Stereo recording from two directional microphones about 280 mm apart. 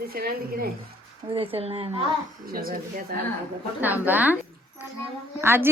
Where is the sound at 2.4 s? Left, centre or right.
Right.